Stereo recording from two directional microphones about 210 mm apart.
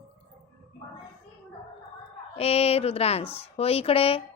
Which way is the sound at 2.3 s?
30° left (ahead or behind).